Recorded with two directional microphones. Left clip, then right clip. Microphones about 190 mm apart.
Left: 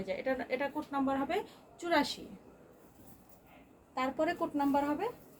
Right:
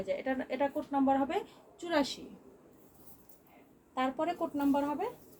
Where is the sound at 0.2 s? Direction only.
20° left (ahead or behind).